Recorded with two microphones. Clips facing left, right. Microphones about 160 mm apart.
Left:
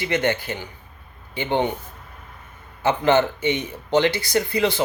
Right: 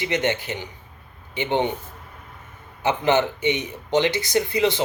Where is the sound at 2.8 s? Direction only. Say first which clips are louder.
Left 2 dB; 15° right (ahead or behind).